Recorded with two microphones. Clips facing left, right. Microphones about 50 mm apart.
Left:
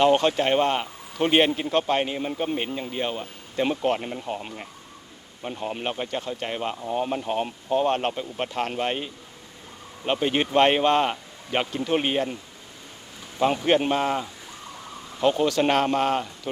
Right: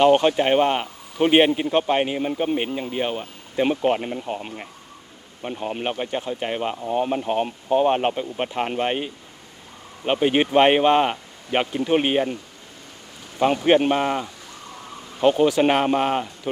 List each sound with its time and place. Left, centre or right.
0.0 s speech: centre
13.7 s speech: centre